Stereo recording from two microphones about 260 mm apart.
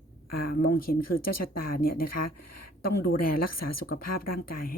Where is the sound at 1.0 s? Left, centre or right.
Left.